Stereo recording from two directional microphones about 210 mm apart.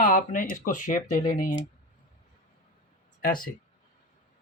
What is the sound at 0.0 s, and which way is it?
Speech, 40° left (ahead or behind).